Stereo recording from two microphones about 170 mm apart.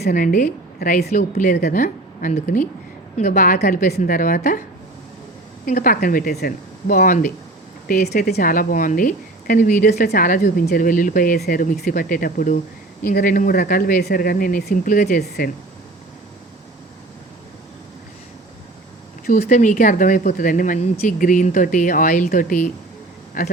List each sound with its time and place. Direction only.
0.0 s a woman's voice: 55° left (ahead or behind)
1.1 s speech: 50° left (ahead or behind)
5.6 s speech: 55° left (ahead or behind)
9.9 s speech: 65° left (ahead or behind)
19.2 s speech: 55° left (ahead or behind)